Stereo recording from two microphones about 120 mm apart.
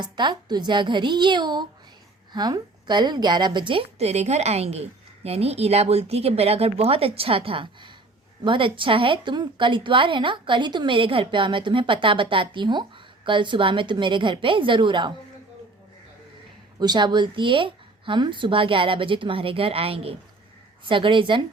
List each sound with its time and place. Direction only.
0.0 s speech: 40° right (ahead or behind)
3.9 s a woman's voice: 65° right (ahead or behind); by 15.1 s 40° right (ahead or behind)
16.8 s a woman's voice: 40° right (ahead or behind)